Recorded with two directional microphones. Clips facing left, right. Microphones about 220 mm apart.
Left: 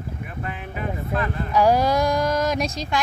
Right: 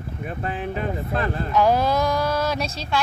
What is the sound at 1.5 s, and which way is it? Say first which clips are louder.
A woman's voice: left 1 dB; 10° left (ahead or behind).